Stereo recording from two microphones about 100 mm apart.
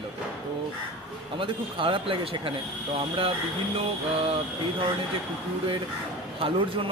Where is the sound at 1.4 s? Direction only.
60° right (ahead or behind).